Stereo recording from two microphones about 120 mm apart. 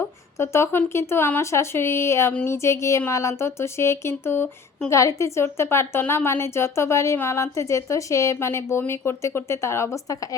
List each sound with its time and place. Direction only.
0.3 s a woman's voice: 20° left (ahead or behind)